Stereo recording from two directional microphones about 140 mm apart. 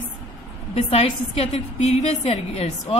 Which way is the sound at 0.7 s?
45° left (ahead or behind).